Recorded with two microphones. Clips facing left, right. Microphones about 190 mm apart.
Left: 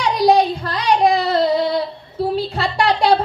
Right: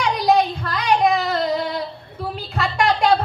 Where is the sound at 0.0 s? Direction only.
35° left (ahead or behind).